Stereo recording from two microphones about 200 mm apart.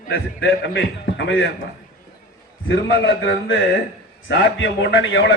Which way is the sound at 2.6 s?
65° left (ahead or behind).